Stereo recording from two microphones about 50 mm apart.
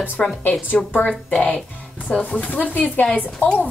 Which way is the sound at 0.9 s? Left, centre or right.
Left.